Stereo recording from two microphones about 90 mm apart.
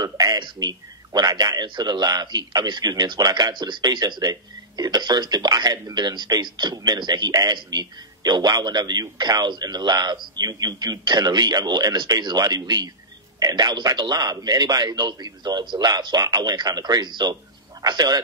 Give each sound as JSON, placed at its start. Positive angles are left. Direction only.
{"t": 0.0, "sound": "a man's voice", "side_deg": -50}